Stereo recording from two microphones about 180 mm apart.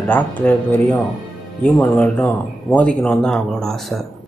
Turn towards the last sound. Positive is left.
turn(degrees=0)  # may be behind; listen again after turning